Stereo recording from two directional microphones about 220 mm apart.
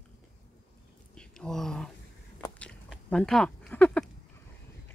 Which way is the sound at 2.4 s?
5° left (ahead or behind).